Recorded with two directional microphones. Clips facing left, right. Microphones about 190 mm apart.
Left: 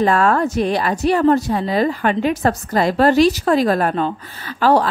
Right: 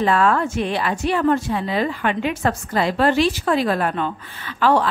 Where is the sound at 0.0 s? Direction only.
40° left (ahead or behind).